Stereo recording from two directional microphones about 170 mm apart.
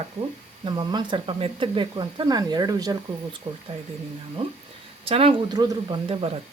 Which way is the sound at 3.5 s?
30° right (ahead or behind).